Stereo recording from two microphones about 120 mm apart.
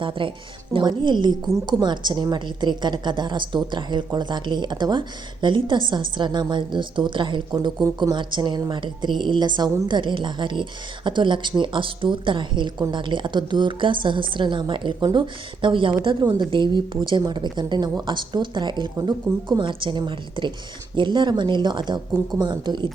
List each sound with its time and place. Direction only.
0.0 s a woman's voice: 45° right (ahead or behind)